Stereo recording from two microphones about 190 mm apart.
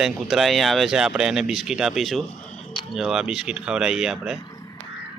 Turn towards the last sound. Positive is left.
turn(degrees=0)  # may be behind; listen again after turning